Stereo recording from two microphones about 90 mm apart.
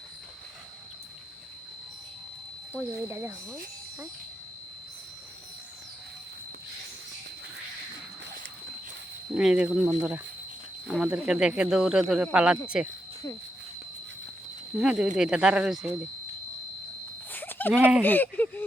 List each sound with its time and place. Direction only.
2.7 s speech: 25° right (ahead or behind)
9.3 s speech: 5° right (ahead or behind)
14.8 s speech: 5° right (ahead or behind)
17.3 s a sound: 20° left (ahead or behind)
17.7 s speech: 10° right (ahead or behind)
18.0 s speech: 20° left (ahead or behind)